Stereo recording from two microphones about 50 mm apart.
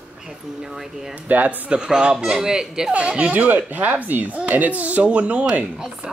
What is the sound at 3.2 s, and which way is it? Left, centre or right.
Speech, right.